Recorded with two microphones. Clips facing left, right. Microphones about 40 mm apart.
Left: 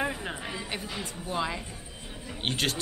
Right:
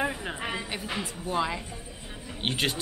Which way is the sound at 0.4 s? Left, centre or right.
Right.